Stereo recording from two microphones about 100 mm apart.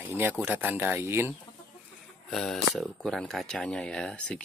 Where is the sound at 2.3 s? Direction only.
5° left (ahead or behind).